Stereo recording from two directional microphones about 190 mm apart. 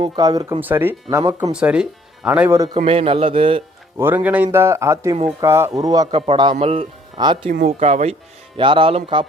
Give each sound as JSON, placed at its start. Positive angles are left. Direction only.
{"t": 0.2, "sound": "speech", "side_deg": -20}
{"t": 1.5, "sound": "speech", "side_deg": -5}
{"t": 2.7, "sound": "speech", "side_deg": -30}
{"t": 3.9, "sound": "speech", "side_deg": -10}